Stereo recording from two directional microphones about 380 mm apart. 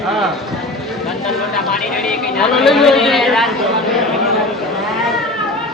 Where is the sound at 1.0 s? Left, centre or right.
Centre.